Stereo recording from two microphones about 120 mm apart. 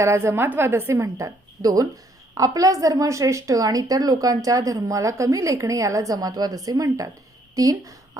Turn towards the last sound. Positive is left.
turn(degrees=-30)  # may be behind; listen again after turning